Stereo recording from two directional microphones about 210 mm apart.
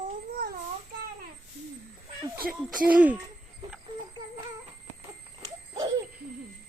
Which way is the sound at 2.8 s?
5° right (ahead or behind).